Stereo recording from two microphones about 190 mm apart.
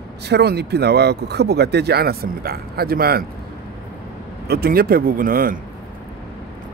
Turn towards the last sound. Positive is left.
turn(degrees=-50)  # may be behind; listen again after turning